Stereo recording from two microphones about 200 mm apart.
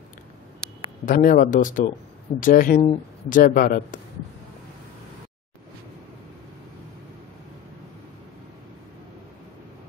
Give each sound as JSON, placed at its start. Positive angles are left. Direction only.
{"t": 1.0, "sound": "speech", "side_deg": 45}